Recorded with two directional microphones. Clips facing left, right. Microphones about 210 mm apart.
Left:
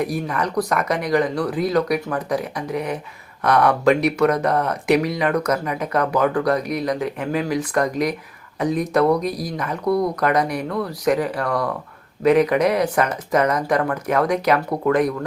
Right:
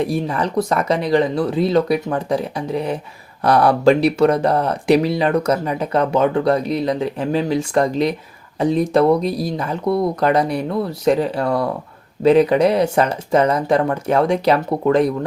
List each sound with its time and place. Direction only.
0.0 s speech: 25° right (ahead or behind)